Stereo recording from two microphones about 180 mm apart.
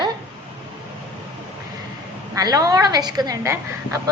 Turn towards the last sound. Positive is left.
turn(degrees=-15)  # may be behind; listen again after turning